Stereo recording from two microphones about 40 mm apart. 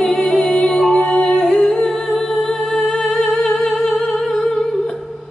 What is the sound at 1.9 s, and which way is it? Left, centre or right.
Humming, centre.